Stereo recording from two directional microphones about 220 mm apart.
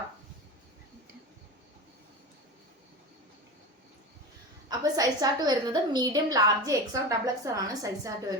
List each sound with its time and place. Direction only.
4.8 s a woman's voice: 15° right (ahead or behind)